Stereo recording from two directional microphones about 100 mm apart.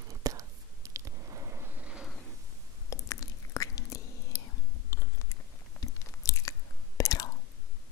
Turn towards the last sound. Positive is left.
turn(degrees=35)  # may be behind; listen again after turning